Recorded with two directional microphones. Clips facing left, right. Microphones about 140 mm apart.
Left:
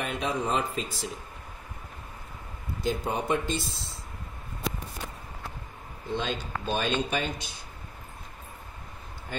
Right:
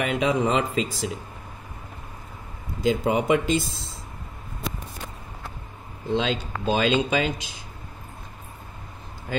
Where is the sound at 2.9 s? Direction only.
90° right.